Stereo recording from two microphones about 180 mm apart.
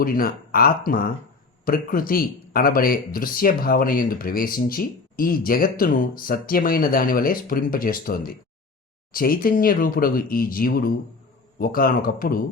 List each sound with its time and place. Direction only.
0.0 s speech: 55° left (ahead or behind)